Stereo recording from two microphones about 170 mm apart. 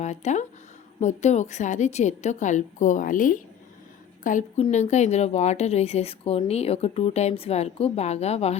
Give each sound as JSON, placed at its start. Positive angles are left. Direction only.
{"t": 0.0, "sound": "a woman's voice", "side_deg": 45}